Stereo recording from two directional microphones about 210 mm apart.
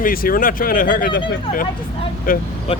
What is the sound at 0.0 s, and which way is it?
Speech, 45° left (ahead or behind).